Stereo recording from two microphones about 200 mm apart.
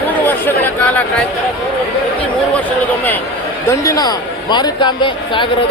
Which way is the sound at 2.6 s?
10° left (ahead or behind).